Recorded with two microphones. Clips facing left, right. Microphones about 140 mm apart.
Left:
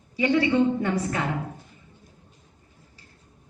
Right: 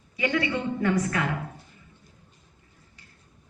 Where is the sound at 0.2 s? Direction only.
30° left (ahead or behind).